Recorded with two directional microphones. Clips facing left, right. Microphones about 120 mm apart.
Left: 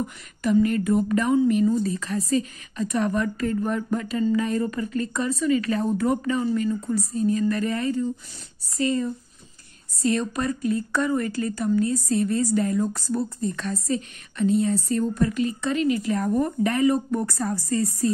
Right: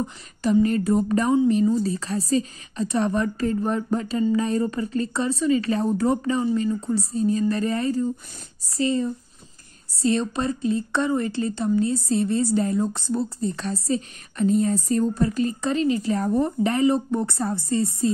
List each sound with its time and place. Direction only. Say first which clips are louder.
0.0 s a woman's voice: right 1 dB; 30° right (ahead or behind)